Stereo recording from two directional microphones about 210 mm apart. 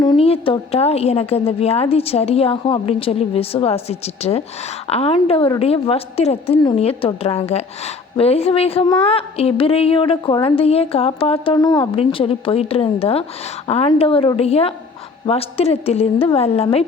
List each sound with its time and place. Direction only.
0.0 s a woman's voice: 25° left (ahead or behind)